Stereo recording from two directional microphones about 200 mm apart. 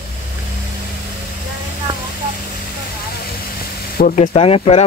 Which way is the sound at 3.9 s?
40° left (ahead or behind).